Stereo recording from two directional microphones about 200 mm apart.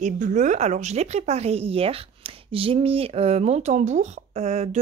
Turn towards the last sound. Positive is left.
turn(degrees=-35)  # may be behind; listen again after turning